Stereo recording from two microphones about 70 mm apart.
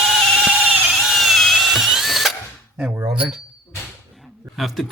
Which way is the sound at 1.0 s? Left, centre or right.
Centre.